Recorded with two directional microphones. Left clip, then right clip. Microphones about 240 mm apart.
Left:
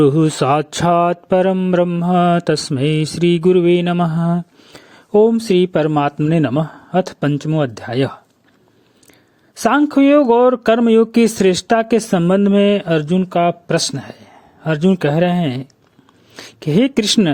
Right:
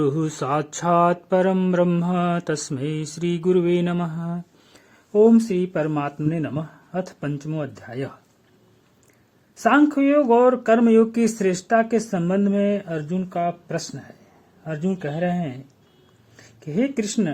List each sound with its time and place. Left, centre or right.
0.0 s mantra: left
5.1 s speech: left
9.6 s speech: left